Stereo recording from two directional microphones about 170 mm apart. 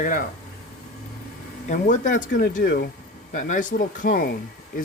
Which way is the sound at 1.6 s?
50° left (ahead or behind).